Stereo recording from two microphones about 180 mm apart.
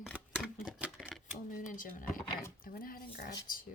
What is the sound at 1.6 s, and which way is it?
Speech, 45° left (ahead or behind).